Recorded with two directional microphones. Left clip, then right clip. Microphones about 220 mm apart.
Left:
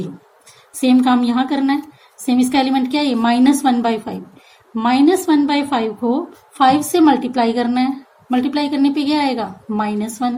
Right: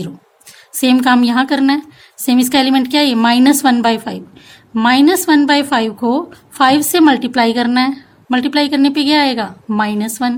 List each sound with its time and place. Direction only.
0.8 s speech: 45° right (ahead or behind)